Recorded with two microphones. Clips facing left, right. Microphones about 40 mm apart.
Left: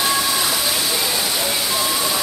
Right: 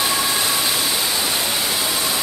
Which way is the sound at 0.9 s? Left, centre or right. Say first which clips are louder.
Left 1 dB; centre.